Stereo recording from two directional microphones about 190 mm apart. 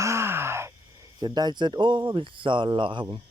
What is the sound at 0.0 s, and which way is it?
Gasp, 15° right (ahead or behind).